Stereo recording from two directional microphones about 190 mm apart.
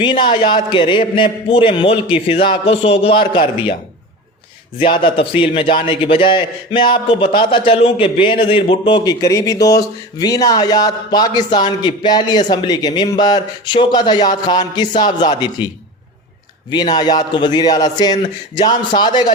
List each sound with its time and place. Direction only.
0.0 s a man's voice: 25° left (ahead or behind)
4.9 s a man's voice: 25° left (ahead or behind)
16.9 s a man's voice: 20° left (ahead or behind)